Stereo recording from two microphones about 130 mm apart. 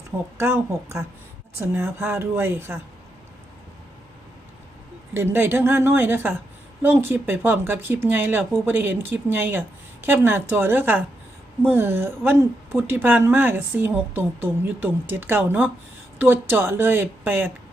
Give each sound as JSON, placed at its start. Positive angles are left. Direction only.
{"t": 0.3, "sound": "a woman's voice", "side_deg": -20}
{"t": 5.1, "sound": "a woman's voice", "side_deg": -15}